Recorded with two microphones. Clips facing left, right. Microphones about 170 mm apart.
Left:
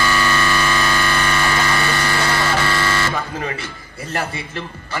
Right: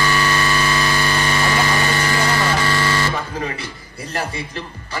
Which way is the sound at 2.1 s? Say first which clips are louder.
Even; 35° right (ahead or behind).